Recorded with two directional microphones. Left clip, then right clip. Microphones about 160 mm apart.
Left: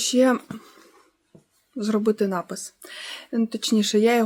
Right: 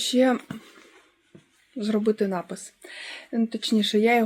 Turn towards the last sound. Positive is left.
turn(degrees=15)  # may be behind; listen again after turning